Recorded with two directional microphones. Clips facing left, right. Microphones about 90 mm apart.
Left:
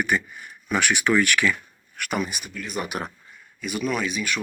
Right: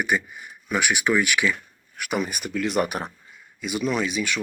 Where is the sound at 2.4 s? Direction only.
80° right.